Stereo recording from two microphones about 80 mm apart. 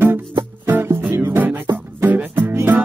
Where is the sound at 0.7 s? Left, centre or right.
Right.